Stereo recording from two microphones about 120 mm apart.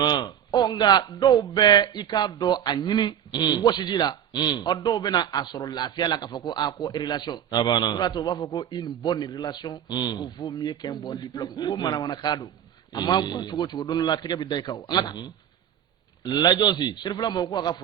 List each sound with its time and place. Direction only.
0.0 s speech: 35° left (ahead or behind)